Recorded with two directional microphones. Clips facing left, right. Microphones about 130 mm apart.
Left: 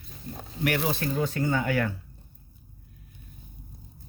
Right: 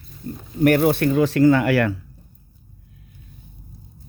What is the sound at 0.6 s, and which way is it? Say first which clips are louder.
Speech: right 11 dB; 50° right (ahead or behind).